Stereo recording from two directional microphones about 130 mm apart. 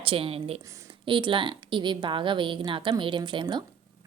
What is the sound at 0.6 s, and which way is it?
Speech, 25° right (ahead or behind).